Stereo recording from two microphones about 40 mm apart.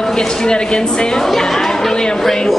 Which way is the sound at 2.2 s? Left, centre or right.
Centre.